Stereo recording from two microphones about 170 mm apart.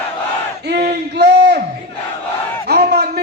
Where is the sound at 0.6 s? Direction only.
80° right.